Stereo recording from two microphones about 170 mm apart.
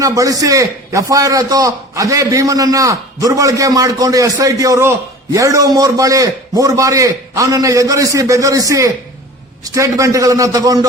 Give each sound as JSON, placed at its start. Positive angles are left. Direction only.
{"t": 0.0, "sound": "a man's voice", "side_deg": -20}